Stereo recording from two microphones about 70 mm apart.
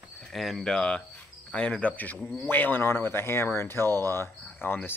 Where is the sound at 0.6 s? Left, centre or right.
Centre; by 4.9 s left.